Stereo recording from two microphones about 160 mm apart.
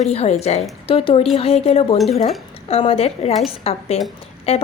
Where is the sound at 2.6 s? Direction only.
40° left (ahead or behind).